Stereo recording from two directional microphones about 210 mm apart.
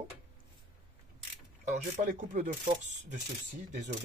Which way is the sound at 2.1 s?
35° right (ahead or behind).